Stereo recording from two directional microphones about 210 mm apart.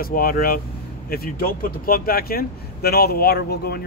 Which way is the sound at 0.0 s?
45° left (ahead or behind).